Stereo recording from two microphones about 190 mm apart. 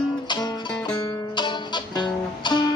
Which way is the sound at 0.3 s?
20° left (ahead or behind).